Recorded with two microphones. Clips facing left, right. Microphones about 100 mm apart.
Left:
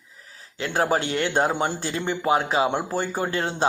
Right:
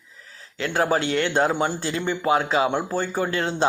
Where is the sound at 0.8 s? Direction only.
35° left (ahead or behind).